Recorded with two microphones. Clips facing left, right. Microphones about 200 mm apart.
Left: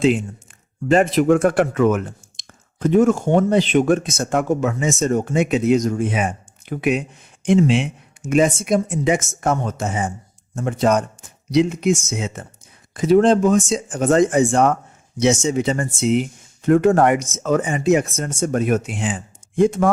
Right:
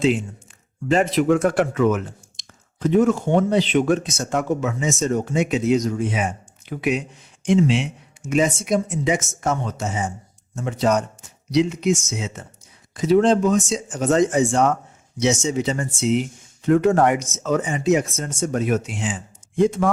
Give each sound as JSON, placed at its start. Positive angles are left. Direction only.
{"t": 0.9, "sound": "speech", "side_deg": 50}